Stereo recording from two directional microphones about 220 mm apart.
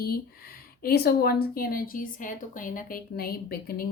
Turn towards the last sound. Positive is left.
turn(degrees=45)  # may be behind; listen again after turning